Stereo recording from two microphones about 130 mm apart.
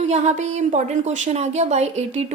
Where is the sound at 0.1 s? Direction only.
60° right (ahead or behind).